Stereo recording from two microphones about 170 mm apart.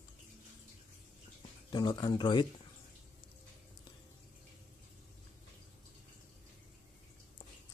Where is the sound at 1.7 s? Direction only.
25° left (ahead or behind).